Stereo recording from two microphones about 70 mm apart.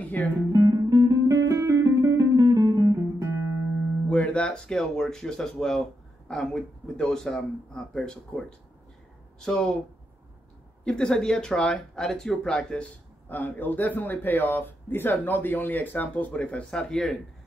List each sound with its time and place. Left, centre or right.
0.0 s guitar: left
0.5 s music: right
4.1 s speech: centre
10.8 s speech: centre
13.3 s speech: left; by 17.1 s centre